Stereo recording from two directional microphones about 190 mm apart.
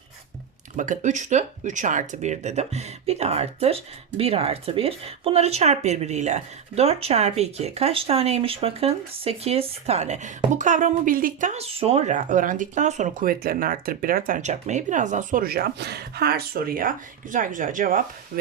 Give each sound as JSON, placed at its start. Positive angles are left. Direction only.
{"t": 0.8, "sound": "speech", "side_deg": -40}